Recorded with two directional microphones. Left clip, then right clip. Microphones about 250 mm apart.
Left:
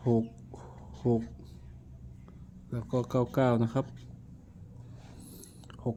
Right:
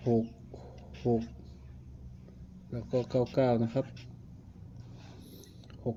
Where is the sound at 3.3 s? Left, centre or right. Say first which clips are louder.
Left 1 dB; left.